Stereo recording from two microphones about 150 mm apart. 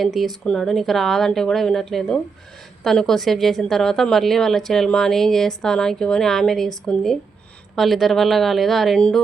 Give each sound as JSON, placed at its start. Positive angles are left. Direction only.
{"t": 0.0, "sound": "a woman's voice", "side_deg": 0}